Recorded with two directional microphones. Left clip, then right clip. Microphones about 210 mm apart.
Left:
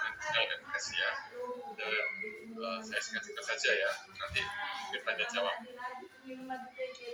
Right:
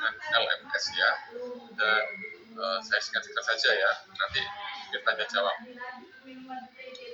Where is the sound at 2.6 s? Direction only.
35° left (ahead or behind).